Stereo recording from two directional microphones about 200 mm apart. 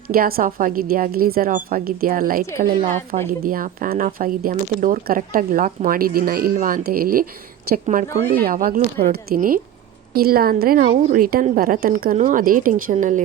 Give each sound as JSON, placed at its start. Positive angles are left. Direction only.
{"t": 0.1, "sound": "a woman's voice", "side_deg": -45}